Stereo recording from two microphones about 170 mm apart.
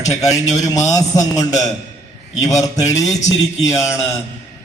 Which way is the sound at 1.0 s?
20° left (ahead or behind).